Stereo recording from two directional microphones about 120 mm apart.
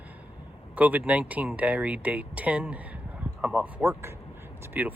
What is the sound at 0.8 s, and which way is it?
Speech, 10° right (ahead or behind).